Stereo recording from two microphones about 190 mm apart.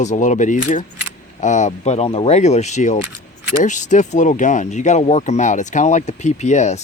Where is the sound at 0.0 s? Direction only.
40° left (ahead or behind).